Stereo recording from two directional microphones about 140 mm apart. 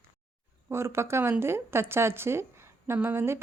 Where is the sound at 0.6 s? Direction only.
20° right (ahead or behind).